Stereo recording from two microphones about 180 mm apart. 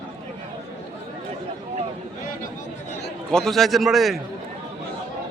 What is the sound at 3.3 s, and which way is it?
Speech, centre (ahead or behind).